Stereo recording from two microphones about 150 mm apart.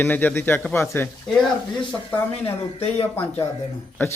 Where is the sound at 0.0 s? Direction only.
10° left (ahead or behind).